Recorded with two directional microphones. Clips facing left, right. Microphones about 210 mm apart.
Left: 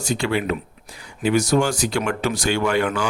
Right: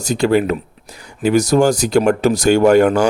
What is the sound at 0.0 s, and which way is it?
Speech, 40° right (ahead or behind).